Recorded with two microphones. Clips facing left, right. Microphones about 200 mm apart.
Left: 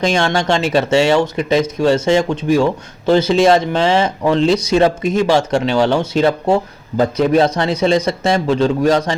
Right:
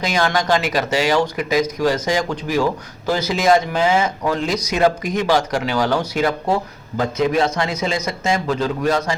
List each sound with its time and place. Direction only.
0.0 s speech: 30° left (ahead or behind)